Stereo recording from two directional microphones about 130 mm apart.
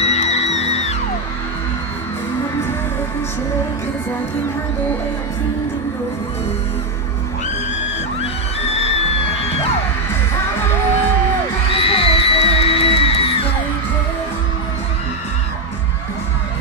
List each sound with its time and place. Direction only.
0.0 s music: 55° left (ahead or behind)
8.2 s music: 50° left (ahead or behind)
11.7 s music: 45° left (ahead or behind)